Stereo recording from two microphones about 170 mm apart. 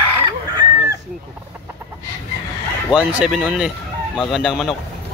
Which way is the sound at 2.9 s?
5° right (ahead or behind).